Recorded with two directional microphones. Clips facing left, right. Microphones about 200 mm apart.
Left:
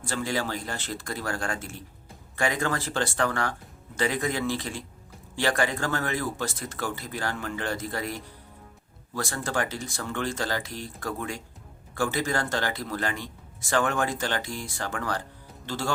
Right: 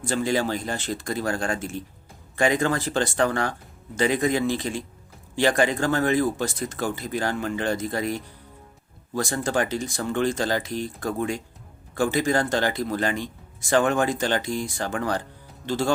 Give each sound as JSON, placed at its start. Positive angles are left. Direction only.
{"t": 0.0, "sound": "speech", "side_deg": -20}